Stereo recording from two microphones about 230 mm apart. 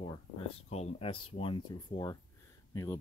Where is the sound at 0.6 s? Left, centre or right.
Left.